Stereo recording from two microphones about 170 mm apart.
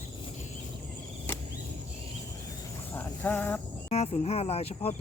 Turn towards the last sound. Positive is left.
turn(degrees=35)  # may be behind; listen again after turning